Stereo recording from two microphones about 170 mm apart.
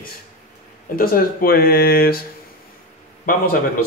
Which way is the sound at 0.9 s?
60° left (ahead or behind).